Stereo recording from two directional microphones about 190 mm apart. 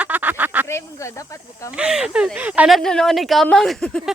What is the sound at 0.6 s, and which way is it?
Speech, 15° left (ahead or behind).